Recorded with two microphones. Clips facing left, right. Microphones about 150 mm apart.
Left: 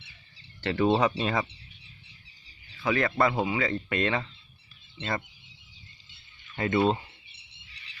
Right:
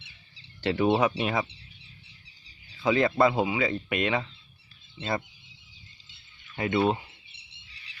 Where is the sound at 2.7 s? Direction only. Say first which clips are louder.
Right 3 dB; 20° right (ahead or behind).